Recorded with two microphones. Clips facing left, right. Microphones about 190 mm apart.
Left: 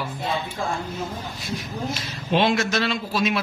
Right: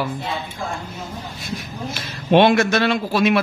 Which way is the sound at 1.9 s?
60° right (ahead or behind).